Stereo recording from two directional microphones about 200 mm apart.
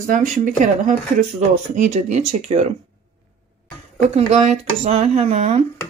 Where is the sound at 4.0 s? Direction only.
35° right (ahead or behind).